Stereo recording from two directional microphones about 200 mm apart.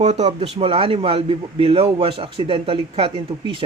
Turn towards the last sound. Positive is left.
turn(degrees=-25)  # may be behind; listen again after turning